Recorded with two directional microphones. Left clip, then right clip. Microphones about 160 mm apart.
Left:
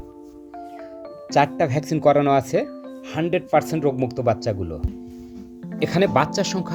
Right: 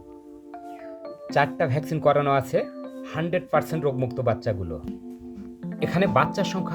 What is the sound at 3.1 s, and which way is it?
Speech, 25° left (ahead or behind).